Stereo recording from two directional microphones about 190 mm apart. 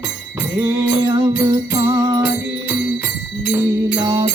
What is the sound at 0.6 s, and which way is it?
Music, 20° right (ahead or behind).